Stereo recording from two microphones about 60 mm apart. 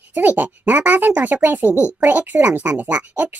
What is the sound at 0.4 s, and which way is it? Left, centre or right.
Speech, right.